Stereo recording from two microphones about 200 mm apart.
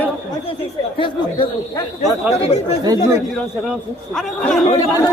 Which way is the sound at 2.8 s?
15° right (ahead or behind).